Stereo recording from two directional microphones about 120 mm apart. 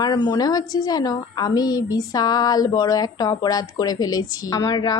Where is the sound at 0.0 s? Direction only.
35° left (ahead or behind).